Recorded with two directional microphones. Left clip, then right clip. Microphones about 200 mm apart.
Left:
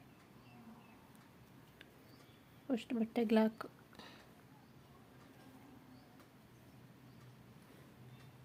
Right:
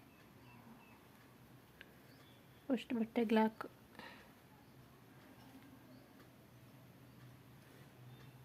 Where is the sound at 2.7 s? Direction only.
5° left (ahead or behind).